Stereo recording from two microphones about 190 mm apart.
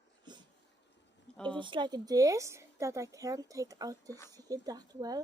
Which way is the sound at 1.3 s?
5° left (ahead or behind).